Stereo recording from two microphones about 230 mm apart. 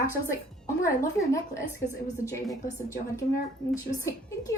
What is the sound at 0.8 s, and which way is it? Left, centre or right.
Speech, centre.